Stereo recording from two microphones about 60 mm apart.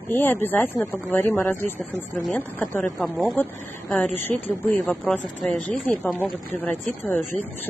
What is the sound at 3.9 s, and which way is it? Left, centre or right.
Speech, left.